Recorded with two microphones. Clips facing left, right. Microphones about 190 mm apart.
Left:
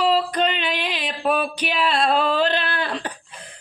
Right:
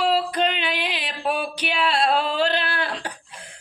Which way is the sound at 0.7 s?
50° left (ahead or behind).